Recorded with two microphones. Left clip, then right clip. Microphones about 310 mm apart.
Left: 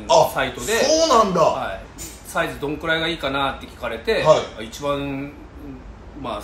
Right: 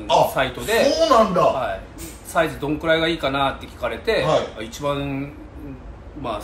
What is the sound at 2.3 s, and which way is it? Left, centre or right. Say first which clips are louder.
Speech: right 3 dB; centre.